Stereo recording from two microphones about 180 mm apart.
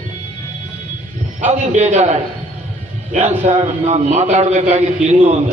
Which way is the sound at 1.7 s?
40° right (ahead or behind).